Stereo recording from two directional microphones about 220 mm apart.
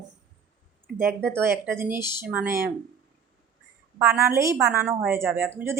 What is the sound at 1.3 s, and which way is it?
A woman's voice, 10° right (ahead or behind).